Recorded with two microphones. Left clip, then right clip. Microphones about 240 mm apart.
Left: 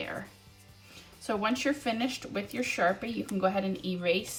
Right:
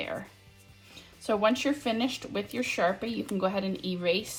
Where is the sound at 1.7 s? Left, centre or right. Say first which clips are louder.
Right 1 dB; centre.